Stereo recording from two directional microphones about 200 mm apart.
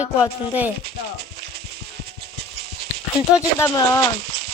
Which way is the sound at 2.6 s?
55° right (ahead or behind).